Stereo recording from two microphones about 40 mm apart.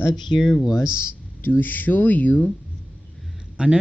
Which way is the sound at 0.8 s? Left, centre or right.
Right.